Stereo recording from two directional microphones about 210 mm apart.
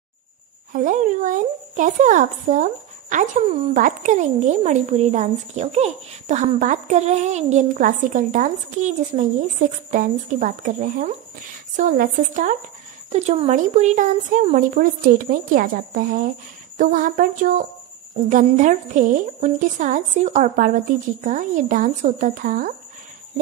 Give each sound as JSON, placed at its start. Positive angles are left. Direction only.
{"t": 0.7, "sound": "a woman's voice", "side_deg": -40}